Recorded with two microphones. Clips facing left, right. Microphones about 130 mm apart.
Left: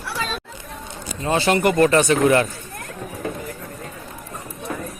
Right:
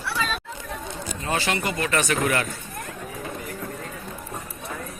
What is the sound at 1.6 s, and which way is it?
Speech, 50° left (ahead or behind).